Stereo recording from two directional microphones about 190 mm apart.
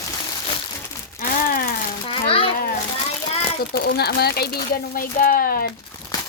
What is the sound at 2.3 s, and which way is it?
Children playing, 30° left (ahead or behind).